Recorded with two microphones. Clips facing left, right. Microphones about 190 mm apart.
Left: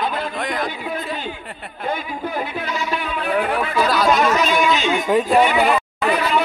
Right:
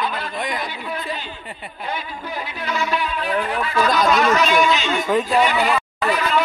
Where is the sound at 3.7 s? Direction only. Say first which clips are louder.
Even; 5° left (ahead or behind).